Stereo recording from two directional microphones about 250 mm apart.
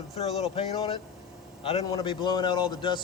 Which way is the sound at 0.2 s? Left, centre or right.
Left.